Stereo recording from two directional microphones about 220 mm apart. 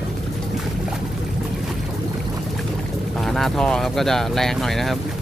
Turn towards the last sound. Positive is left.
turn(degrees=0)  # may be behind; listen again after turning